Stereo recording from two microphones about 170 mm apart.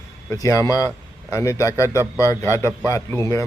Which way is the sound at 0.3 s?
20° left (ahead or behind).